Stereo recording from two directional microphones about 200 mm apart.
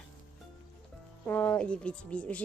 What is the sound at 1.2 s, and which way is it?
Speech, 10° left (ahead or behind).